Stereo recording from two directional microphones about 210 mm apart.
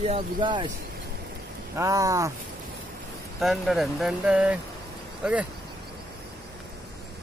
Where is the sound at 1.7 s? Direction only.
15° right (ahead or behind).